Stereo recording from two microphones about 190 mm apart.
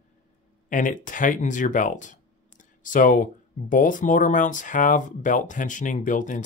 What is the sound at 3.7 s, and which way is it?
Speech, 45° left (ahead or behind).